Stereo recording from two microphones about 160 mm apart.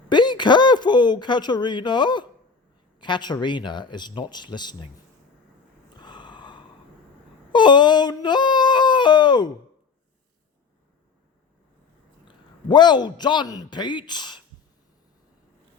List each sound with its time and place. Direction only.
0.1 s a woman's voice: 30° left (ahead or behind)
6.0 s a sound: 30° left (ahead or behind)
12.6 s speech: 25° left (ahead or behind)